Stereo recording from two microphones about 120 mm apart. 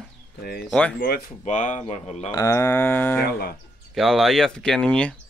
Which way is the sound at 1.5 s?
85° left.